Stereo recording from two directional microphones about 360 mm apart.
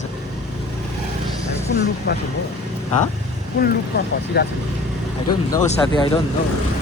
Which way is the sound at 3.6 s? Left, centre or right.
Left.